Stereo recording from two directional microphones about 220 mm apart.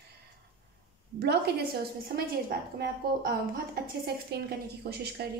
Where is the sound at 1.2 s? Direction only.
45° right (ahead or behind).